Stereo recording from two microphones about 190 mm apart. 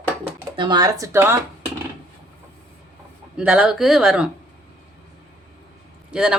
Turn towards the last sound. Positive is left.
turn(degrees=-5)  # may be behind; listen again after turning